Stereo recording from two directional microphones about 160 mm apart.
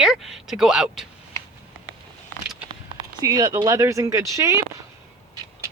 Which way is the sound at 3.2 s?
25° right (ahead or behind).